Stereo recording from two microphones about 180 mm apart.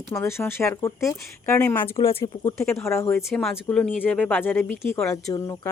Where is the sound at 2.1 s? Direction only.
30° left (ahead or behind).